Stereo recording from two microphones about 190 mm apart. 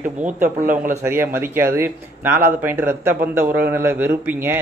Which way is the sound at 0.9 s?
10° right (ahead or behind).